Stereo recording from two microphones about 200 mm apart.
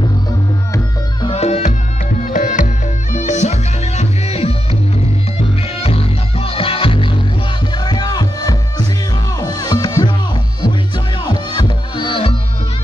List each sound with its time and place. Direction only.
1.2 s music: 30° left (ahead or behind)
5.8 s music: 30° left (ahead or behind)
11.2 s music: 20° left (ahead or behind)